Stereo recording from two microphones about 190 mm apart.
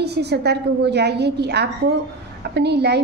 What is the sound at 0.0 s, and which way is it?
A woman's voice, 60° right (ahead or behind).